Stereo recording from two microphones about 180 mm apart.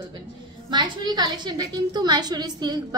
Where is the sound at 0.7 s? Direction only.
25° right (ahead or behind).